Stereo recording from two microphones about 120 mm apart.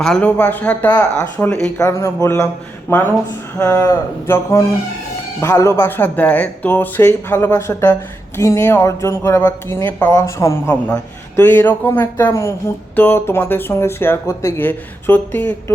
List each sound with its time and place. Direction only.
0.0 s speech: 10° left (ahead or behind)
1.8 s speech: 20° left (ahead or behind)
3.6 s speech: 30° left (ahead or behind)